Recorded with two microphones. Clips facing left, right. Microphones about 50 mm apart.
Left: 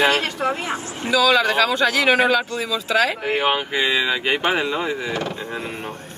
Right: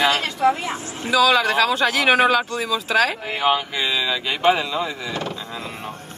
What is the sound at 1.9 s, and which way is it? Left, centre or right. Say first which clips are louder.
Speech: even; right.